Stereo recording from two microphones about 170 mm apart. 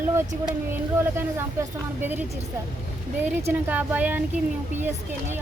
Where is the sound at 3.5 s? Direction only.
10° right (ahead or behind).